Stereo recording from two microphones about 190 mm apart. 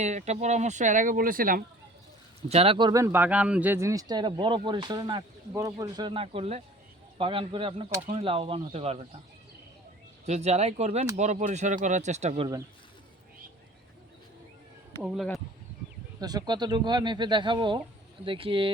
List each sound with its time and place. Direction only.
0.0 s speech: 35° right (ahead or behind)
2.5 s speech: 30° right (ahead or behind)
10.2 s speech: 35° right (ahead or behind)
15.0 s speech: centre (ahead or behind)
16.2 s speech: 20° right (ahead or behind)